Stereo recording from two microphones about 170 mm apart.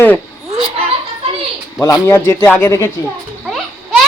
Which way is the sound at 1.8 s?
20° left (ahead or behind).